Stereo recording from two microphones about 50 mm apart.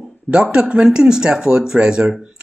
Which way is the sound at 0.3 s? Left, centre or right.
Centre.